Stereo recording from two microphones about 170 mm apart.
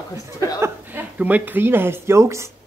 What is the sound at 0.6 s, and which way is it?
A woman's voice, 10° right (ahead or behind).